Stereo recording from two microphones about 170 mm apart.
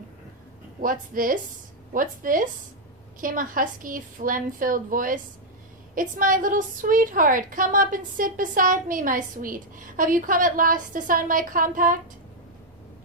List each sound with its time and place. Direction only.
0.8 s a woman's voice: 55° right (ahead or behind)